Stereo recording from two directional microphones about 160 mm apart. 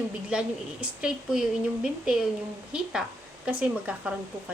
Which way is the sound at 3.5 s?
10° right (ahead or behind).